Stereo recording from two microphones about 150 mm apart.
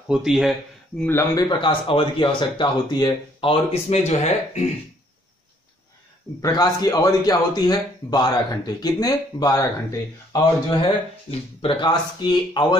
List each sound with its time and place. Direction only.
0.1 s speech: 5° right (ahead or behind)
1.0 s a man's voice: 15° left (ahead or behind)
1.5 s speech: 35° left (ahead or behind)
6.4 s a man's voice: 25° left (ahead or behind)